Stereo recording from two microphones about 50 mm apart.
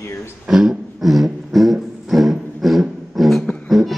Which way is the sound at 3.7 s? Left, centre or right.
Centre.